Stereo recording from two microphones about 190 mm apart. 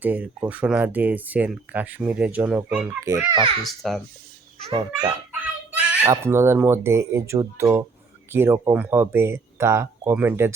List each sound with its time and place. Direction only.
0.0 s speech: 10° right (ahead or behind)
3.0 s speech: 15° right (ahead or behind)
3.7 s a child's voice: centre (ahead or behind)